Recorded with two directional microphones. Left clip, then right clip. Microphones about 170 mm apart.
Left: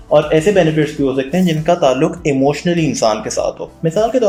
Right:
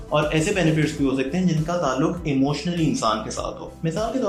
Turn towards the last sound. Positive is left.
turn(degrees=40)  # may be behind; listen again after turning